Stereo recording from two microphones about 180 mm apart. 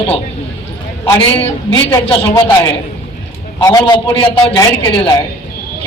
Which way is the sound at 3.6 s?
20° left (ahead or behind).